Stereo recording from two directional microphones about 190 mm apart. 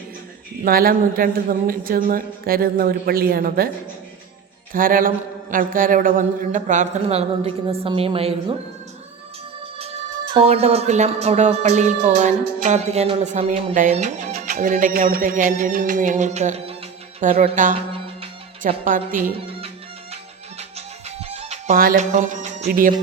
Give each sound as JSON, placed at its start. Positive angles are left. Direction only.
{"t": 0.6, "sound": "a woman's voice", "side_deg": -50}
{"t": 4.7, "sound": "a woman's voice", "side_deg": -45}
{"t": 7.0, "sound": "a woman's voice", "side_deg": -30}
{"t": 10.3, "sound": "a woman's voice", "side_deg": -35}
{"t": 17.7, "sound": "music", "side_deg": -30}
{"t": 18.9, "sound": "a woman's voice", "side_deg": -45}
{"t": 20.6, "sound": "music", "side_deg": -35}
{"t": 21.7, "sound": "a woman's voice", "side_deg": -45}